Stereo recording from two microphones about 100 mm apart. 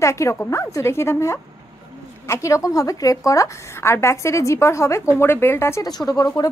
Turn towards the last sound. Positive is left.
turn(degrees=40)  # may be behind; listen again after turning